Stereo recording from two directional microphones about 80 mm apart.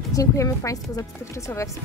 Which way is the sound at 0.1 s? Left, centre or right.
Left.